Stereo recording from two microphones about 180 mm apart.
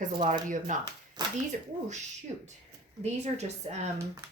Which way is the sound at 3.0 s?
40° right (ahead or behind).